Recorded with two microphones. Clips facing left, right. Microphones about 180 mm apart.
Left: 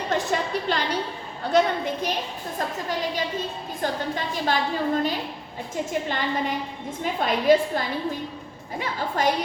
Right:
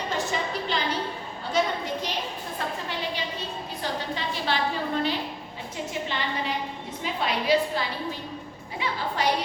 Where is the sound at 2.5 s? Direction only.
40° left (ahead or behind).